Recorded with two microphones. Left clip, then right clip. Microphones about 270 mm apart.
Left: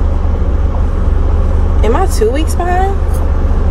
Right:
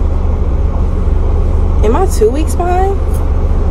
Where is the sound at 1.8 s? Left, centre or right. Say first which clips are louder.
Right 1 dB; centre.